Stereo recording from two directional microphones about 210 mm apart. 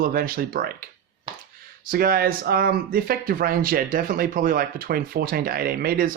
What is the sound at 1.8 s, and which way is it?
Speech, 45° right (ahead or behind).